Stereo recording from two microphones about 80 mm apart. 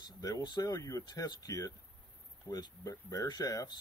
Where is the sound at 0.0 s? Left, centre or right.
Left.